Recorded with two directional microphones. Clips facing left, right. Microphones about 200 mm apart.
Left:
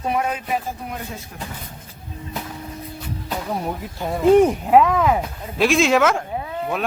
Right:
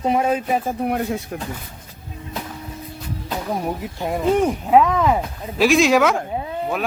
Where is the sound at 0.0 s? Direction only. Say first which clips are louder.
Right 4 dB; 25° right (ahead or behind).